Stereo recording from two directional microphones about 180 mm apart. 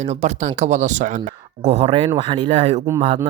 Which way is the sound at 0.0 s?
40° right (ahead or behind).